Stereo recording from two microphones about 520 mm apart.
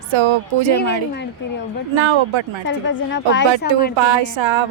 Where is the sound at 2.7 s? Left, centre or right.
Left.